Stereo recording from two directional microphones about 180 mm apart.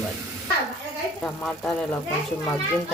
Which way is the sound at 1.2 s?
5° left (ahead or behind).